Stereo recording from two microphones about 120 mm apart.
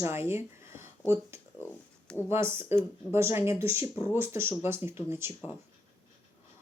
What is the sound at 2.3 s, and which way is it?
Speech, 20° right (ahead or behind).